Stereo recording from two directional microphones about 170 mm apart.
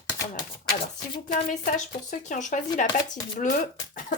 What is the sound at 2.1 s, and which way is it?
Speech, 45° left (ahead or behind).